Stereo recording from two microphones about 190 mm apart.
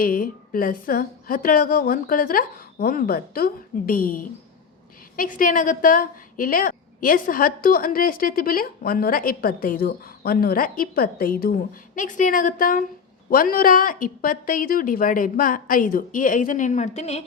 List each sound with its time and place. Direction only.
0.0 s a woman's voice: 45° left (ahead or behind)